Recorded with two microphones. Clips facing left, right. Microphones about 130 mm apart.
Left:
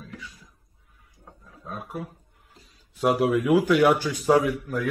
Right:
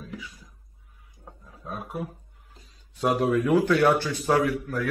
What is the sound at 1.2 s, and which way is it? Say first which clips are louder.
Roaring cats: right 2 dB; 10° right (ahead or behind).